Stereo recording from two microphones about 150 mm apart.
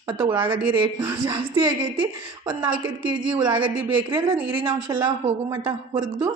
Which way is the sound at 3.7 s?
15° right (ahead or behind).